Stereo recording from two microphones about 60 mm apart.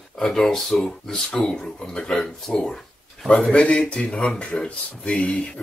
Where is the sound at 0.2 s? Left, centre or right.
Centre.